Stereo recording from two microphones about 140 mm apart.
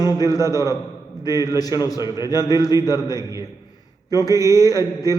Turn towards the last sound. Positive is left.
turn(degrees=25)  # may be behind; listen again after turning